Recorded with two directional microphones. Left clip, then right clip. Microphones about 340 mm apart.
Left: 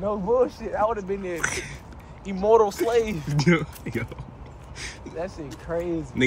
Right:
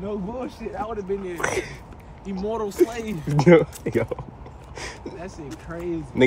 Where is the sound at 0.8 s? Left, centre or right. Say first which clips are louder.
Left 7 dB; left.